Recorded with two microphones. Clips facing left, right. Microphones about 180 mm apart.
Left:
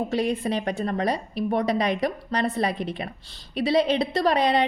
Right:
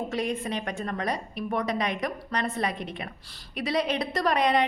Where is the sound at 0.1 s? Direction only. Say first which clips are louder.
Left 5 dB; 35° left (ahead or behind).